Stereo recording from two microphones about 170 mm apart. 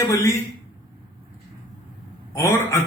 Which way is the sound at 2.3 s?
15° left (ahead or behind).